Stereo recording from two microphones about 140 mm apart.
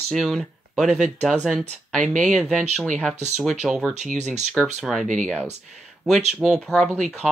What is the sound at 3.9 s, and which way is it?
Speech, 55° right (ahead or behind).